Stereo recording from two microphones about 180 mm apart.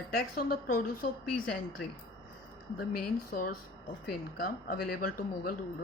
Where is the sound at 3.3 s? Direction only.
50° left (ahead or behind).